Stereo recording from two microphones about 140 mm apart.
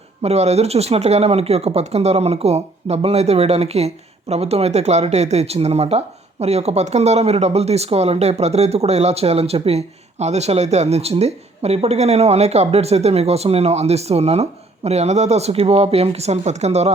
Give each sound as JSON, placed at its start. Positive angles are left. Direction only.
{"t": 0.2, "sound": "speech", "side_deg": -50}